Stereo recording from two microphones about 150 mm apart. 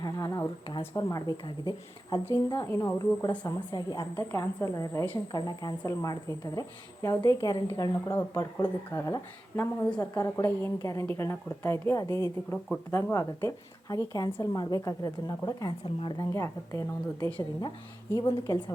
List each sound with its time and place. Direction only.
0.0 s a sound: 25° left (ahead or behind)
0.9 s a woman's voice: 25° left (ahead or behind)
16.3 s a woman's voice: 20° left (ahead or behind)